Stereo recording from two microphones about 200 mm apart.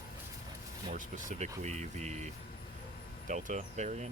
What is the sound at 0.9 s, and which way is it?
Speech, 40° right (ahead or behind).